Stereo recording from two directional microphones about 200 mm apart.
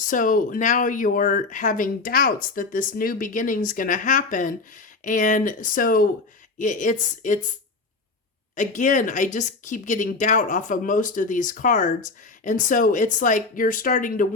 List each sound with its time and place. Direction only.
0.0 s speech: 40° left (ahead or behind)
8.5 s speech: 40° left (ahead or behind)